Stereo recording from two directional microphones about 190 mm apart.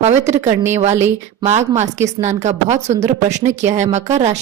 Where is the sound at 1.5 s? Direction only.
40° right (ahead or behind).